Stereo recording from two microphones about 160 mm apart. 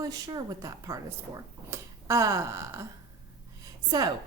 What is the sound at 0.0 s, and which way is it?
A woman's voice, 25° right (ahead or behind).